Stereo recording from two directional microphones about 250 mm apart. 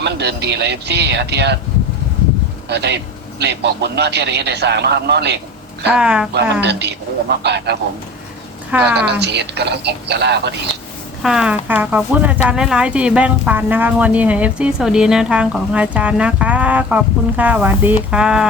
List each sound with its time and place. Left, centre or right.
0.0 s a man's voice: right
2.6 s a man's voice: right
5.9 s speech: centre
6.3 s a man's voice: right
9.0 s a man's voice: right
11.2 s speech: centre